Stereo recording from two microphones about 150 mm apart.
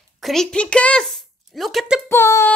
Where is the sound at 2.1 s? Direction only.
15° left (ahead or behind).